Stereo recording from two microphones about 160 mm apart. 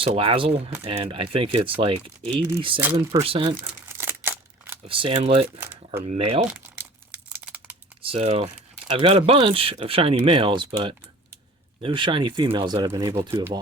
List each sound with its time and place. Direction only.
0.0 s speech: 35° right (ahead or behind)
3.8 s a sound: 15° right (ahead or behind)
4.9 s speech: 35° right (ahead or behind)
6.5 s crumpling: 10° right (ahead or behind)
8.0 s speech: 35° right (ahead or behind)